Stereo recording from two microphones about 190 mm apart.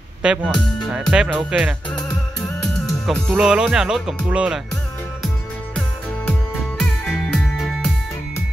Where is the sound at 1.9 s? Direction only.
20° left (ahead or behind).